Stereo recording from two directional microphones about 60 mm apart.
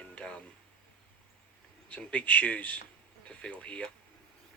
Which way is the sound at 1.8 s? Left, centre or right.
Left.